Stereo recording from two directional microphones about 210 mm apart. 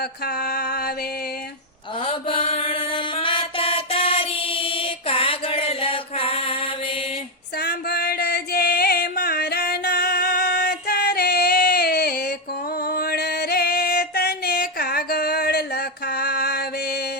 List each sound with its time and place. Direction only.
0.3 s a sound: 45° left (ahead or behind)
2.0 s mantra: 25° left (ahead or behind)
7.6 s music: 50° left (ahead or behind)